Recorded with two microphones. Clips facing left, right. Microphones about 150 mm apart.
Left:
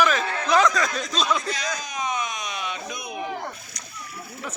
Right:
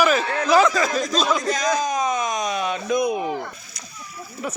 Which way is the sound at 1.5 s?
45° right (ahead or behind).